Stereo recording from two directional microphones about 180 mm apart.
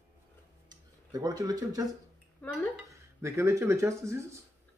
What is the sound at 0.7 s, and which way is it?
Speech, 20° right (ahead or behind).